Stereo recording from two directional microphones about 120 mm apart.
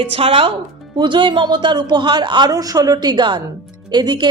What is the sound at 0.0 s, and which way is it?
Speech, 50° right (ahead or behind).